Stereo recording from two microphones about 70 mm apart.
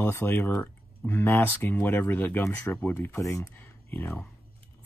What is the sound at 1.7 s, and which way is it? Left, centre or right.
Speech, left.